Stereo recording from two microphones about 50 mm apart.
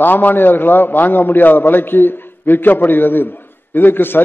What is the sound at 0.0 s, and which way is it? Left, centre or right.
A man's voice, left.